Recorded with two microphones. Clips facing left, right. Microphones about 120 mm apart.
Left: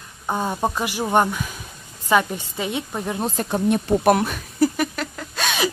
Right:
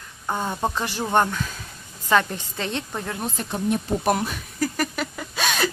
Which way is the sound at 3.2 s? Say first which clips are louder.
Left 5 dB; 35° left (ahead or behind).